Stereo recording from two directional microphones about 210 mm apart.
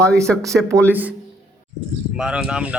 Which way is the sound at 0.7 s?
10° right (ahead or behind).